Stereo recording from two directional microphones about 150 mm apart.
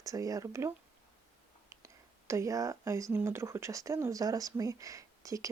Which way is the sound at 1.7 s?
20° right (ahead or behind).